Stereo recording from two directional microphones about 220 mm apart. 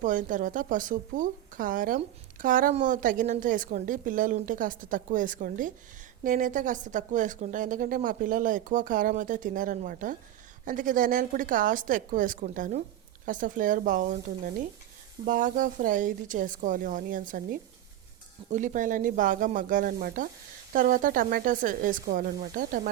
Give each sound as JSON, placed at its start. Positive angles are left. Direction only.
{"t": 0.0, "sound": "a woman's voice", "side_deg": -35}